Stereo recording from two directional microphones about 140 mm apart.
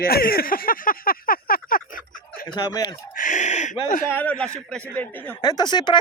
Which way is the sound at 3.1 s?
65° left (ahead or behind).